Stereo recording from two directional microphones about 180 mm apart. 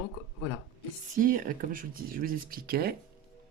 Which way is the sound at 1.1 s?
50° right (ahead or behind).